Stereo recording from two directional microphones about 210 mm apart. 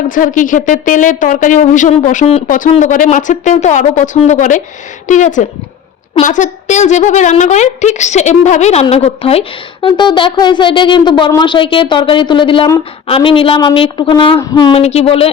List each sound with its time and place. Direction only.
0.1 s a woman's voice: 40° left (ahead or behind)